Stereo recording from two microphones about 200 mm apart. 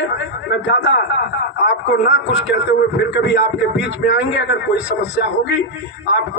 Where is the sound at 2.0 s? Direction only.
55° left (ahead or behind).